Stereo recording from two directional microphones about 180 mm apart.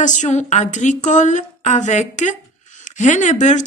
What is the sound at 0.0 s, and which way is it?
Speech, 45° left (ahead or behind).